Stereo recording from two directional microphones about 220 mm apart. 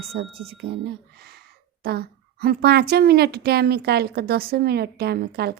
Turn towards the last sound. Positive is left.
turn(degrees=-45)  # may be behind; listen again after turning